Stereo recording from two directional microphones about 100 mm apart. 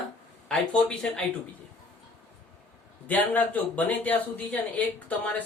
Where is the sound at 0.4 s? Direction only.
10° left (ahead or behind).